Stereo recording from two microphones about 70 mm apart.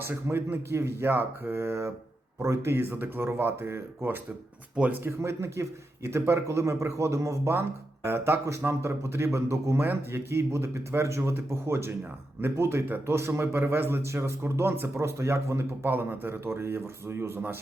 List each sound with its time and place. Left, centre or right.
0.0 s speech: right
5.2 s speech: right
15.9 s speech: right